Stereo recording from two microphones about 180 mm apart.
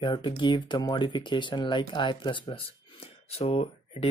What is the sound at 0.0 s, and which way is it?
Speech, 25° left (ahead or behind).